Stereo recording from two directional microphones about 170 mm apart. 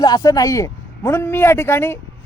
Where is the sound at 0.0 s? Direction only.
25° left (ahead or behind).